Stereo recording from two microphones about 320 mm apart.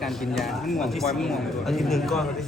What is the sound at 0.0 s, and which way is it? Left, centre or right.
Speech, centre.